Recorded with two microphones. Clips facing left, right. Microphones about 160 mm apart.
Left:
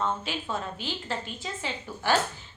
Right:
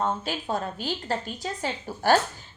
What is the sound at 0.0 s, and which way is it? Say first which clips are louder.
A woman's voice: right 2 dB; 40° right (ahead or behind).